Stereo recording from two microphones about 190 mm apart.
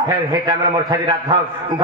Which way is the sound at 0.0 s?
20° right (ahead or behind).